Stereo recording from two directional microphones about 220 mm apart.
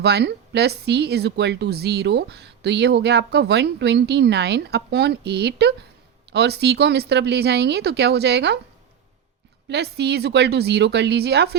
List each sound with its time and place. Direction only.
0.0 s speech: 50° right (ahead or behind)
9.6 s speech: 50° right (ahead or behind)